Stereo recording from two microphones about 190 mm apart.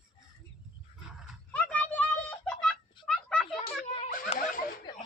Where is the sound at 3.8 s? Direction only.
35° left (ahead or behind).